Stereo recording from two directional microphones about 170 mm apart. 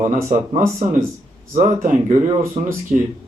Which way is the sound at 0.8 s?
45° right (ahead or behind).